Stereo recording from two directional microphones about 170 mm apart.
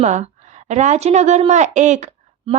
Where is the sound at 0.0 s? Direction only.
45° right (ahead or behind).